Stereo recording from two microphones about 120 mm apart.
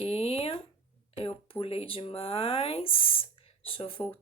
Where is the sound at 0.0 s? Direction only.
55° left (ahead or behind).